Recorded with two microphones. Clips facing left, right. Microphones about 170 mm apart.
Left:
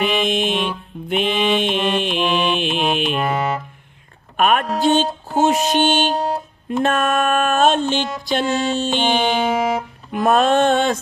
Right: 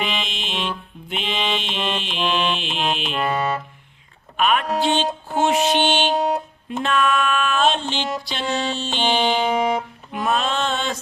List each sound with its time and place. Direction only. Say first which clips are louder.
0.0 s music: left 9 dB; 50° left (ahead or behind)
2.0 s mantra: left 8 dB; 55° left (ahead or behind)
2.2 s mantra: even; 10° left (ahead or behind)
2.7 s music: left 4 dB; 10° left (ahead or behind)
4.4 s speech: left 3 dB; 50° left (ahead or behind)
4.8 s music: left 4 dB; 45° left (ahead or behind)
6.1 s music: right 1 dB; centre (ahead or behind)
6.7 s a sound: left 3 dB; 50° left (ahead or behind)
8.2 s music: left 5 dB; 50° left (ahead or behind)
10.1 s a sound: left 7 dB; 50° left (ahead or behind)